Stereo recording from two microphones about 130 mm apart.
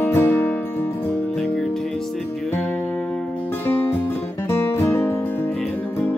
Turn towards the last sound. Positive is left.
turn(degrees=15)  # may be behind; listen again after turning